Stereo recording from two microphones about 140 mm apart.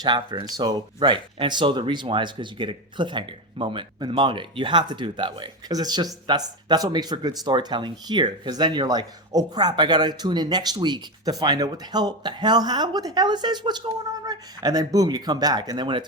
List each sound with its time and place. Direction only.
0.0 s speech: 35° right (ahead or behind)